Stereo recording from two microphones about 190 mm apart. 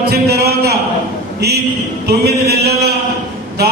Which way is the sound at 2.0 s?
55° right (ahead or behind).